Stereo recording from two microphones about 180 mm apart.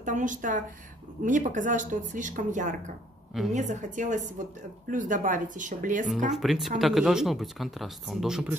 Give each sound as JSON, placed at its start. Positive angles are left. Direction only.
{"t": 0.0, "sound": "speech", "side_deg": -45}
{"t": 6.3, "sound": "speech", "side_deg": 0}